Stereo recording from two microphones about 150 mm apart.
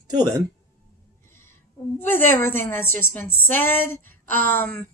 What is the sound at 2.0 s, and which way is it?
A woman's voice, 15° left (ahead or behind).